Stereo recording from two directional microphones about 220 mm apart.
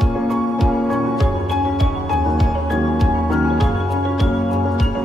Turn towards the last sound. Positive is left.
turn(degrees=0)  # may be behind; listen again after turning